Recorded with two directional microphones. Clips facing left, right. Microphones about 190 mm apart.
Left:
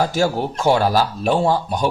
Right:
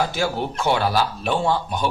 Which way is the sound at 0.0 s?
40° left (ahead or behind).